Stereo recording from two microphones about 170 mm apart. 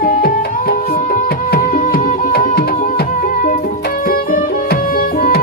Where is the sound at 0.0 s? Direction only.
55° left (ahead or behind).